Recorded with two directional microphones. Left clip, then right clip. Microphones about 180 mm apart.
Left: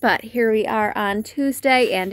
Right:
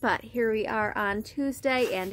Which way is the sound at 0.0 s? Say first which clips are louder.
Left 8 dB; 35° left (ahead or behind).